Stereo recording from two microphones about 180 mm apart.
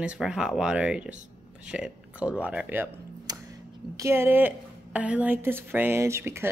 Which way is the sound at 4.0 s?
15° right (ahead or behind).